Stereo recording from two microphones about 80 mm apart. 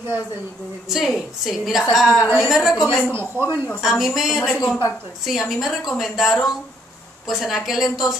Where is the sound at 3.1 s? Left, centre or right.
Right.